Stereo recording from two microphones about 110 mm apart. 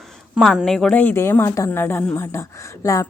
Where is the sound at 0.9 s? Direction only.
20° left (ahead or behind).